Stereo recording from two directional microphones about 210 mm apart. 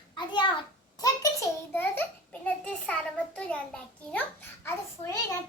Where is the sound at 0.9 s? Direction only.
15° left (ahead or behind).